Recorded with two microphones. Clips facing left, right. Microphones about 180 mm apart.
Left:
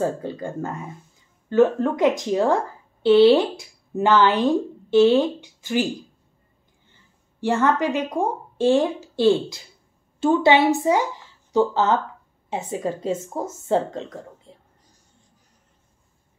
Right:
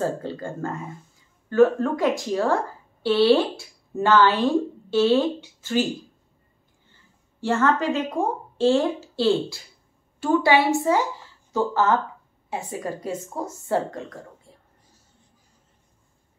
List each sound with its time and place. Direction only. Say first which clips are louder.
0.0 s speech: left 2 dB; 15° left (ahead or behind)
7.3 s speech: left 1 dB; 15° left (ahead or behind)